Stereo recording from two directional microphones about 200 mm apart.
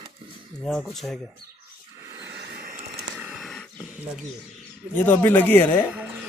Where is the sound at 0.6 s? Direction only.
Centre (ahead or behind).